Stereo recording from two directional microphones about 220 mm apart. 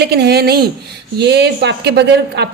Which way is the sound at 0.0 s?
45° right (ahead or behind).